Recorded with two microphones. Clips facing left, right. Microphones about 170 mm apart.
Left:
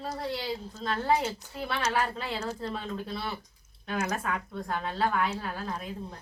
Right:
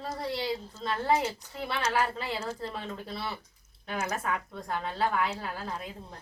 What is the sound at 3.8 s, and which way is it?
Speech, 5° right (ahead or behind).